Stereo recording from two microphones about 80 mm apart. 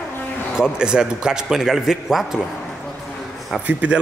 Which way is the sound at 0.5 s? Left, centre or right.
Centre.